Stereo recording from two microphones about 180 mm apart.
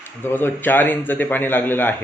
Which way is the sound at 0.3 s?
10° left (ahead or behind).